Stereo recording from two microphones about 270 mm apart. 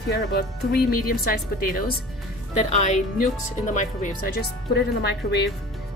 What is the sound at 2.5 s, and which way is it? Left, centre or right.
Speech, left.